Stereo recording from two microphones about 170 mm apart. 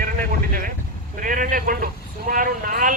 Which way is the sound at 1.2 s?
50° right (ahead or behind).